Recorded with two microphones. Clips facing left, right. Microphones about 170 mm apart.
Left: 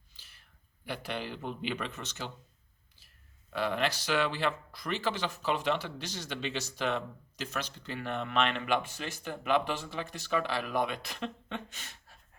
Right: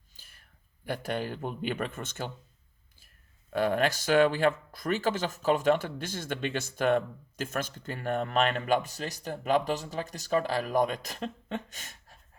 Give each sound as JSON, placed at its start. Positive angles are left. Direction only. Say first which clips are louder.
{"t": 0.1, "sound": "a sound", "louder": "right 2 dB", "side_deg": -50}
{"t": 0.9, "sound": "speech", "louder": "right 5 dB", "side_deg": -45}
{"t": 3.5, "sound": "speech", "louder": "right 5 dB", "side_deg": -45}